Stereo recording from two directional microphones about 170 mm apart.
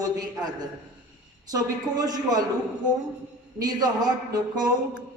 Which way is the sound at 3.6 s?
25° right (ahead or behind).